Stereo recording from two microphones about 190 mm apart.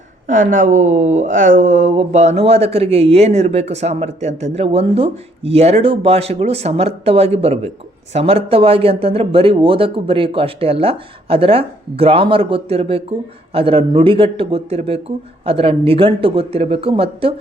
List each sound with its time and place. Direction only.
0.3 s speech: 40° right (ahead or behind)